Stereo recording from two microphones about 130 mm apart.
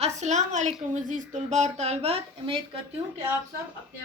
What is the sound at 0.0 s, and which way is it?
A woman's voice, 60° right (ahead or behind).